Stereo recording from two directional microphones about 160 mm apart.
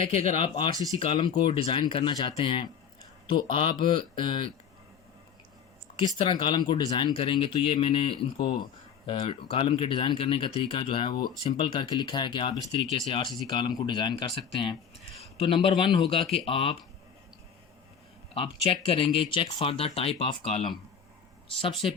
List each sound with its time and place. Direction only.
0.3 s speech: 40° left (ahead or behind)
6.1 s a man's voice: 30° left (ahead or behind)
18.3 s speech: 35° left (ahead or behind)